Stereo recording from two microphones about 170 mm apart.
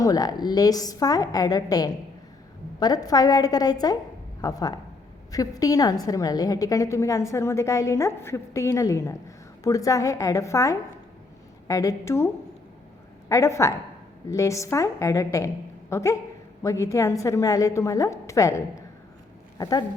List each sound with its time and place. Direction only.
0.0 s a woman's voice: 20° left (ahead or behind)